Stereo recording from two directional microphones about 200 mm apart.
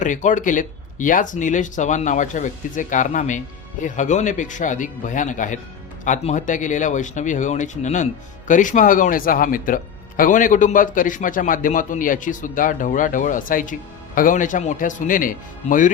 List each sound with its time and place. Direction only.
0.0 s speech: 40° left (ahead or behind)